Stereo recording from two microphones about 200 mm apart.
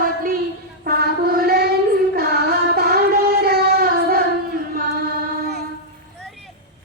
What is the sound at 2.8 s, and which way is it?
Child singing, 50° right (ahead or behind).